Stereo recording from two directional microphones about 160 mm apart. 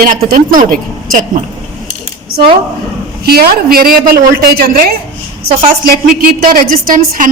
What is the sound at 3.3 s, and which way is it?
A woman's voice, 70° right (ahead or behind).